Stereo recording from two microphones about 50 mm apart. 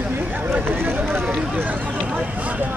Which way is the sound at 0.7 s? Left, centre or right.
Right.